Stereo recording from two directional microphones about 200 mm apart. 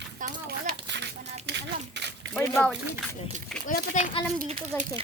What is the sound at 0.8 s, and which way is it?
Speech, 60° right (ahead or behind).